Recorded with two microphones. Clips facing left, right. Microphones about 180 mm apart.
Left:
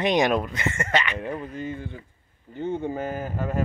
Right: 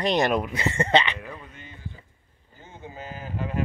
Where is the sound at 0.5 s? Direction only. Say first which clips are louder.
Right 3 dB; 30° right (ahead or behind).